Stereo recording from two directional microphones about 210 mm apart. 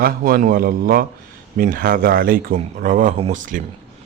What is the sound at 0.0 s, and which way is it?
A man's voice, 40° right (ahead or behind).